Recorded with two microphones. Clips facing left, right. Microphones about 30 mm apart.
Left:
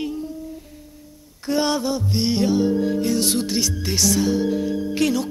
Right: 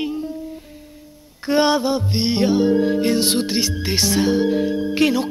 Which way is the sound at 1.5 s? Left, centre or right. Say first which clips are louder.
Right 4 dB; right.